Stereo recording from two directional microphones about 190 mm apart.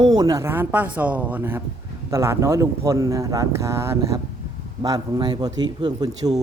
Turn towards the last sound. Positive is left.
turn(degrees=-20)  # may be behind; listen again after turning